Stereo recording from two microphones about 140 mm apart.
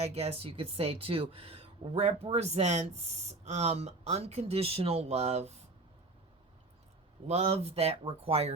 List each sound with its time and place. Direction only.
0.0 s speech: 45° right (ahead or behind)
7.3 s speech: 50° right (ahead or behind)